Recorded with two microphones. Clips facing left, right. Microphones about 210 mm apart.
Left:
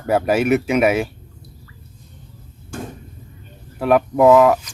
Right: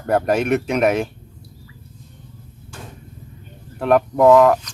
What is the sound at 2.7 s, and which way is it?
Vehicle, 50° left (ahead or behind).